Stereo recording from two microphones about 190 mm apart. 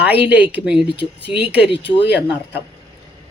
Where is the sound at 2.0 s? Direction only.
10° right (ahead or behind).